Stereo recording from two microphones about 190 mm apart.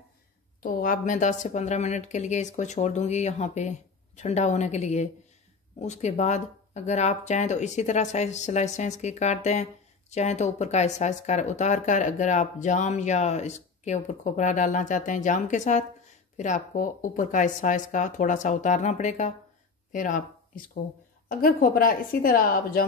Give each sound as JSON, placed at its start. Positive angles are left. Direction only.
{"t": 0.6, "sound": "a woman's voice", "side_deg": 45}